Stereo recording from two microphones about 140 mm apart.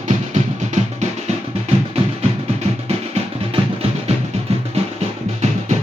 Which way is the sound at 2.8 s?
45° right (ahead or behind).